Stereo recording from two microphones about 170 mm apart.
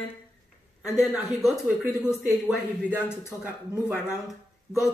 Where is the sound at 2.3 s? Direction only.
10° right (ahead or behind).